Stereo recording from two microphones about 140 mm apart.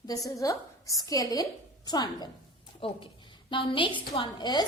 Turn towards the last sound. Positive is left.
turn(degrees=30)  # may be behind; listen again after turning